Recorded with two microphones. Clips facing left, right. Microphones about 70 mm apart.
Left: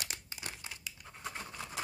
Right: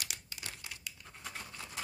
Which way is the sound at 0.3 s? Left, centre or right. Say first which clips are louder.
Left 2 dB; left.